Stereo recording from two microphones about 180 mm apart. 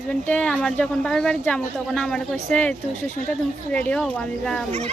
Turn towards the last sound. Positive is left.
turn(degrees=5)  # may be behind; listen again after turning